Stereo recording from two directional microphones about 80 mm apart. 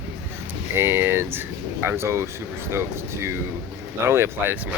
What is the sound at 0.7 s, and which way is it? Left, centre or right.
Speech, right.